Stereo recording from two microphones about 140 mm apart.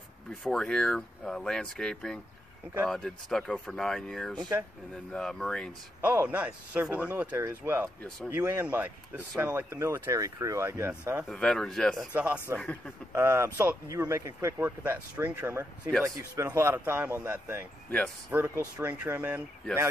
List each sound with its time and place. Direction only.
0.3 s speech: 5° left (ahead or behind)
5.9 s speech: 15° right (ahead or behind)
11.2 s speech: 5° left (ahead or behind)
12.1 s speech: 10° right (ahead or behind)
12.5 s speech: 5° left (ahead or behind)
13.1 s speech: 15° right (ahead or behind)
17.8 s speech: 10° left (ahead or behind)
18.3 s speech: 15° right (ahead or behind)